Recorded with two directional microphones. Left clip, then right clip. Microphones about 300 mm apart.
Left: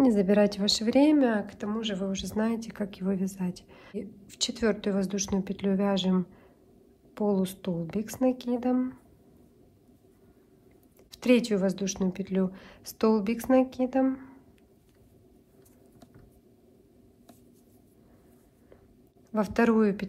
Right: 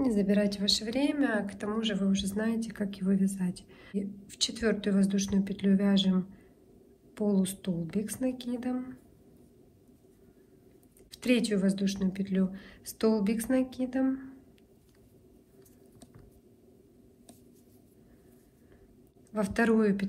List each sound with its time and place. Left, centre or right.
0.0 s a woman's voice: left
11.1 s a woman's voice: centre
19.3 s a woman's voice: centre